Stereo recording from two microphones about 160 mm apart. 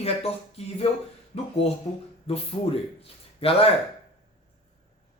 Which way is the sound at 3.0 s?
35° left (ahead or behind).